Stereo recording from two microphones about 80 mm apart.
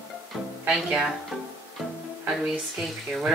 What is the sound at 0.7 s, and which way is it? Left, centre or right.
Speech, centre.